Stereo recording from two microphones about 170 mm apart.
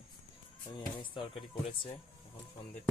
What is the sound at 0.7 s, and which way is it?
Speech, 30° left (ahead or behind).